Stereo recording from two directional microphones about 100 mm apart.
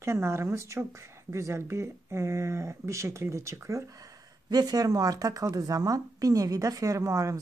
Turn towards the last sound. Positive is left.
turn(degrees=-30)  # may be behind; listen again after turning